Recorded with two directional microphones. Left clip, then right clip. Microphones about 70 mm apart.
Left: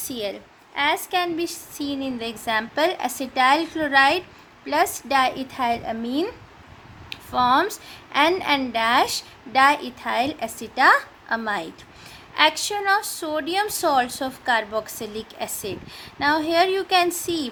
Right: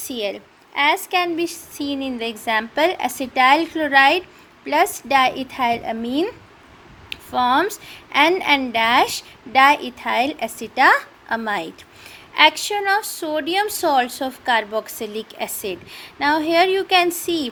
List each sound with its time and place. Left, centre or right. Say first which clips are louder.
0.0 s a child's voice: right 4 dB; right
0.3 s a child's voice: right 4 dB; right
1.4 s a woman's voice: right 3 dB; right